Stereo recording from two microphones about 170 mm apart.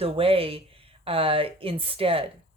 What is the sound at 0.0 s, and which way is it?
Speech, 35° right (ahead or behind).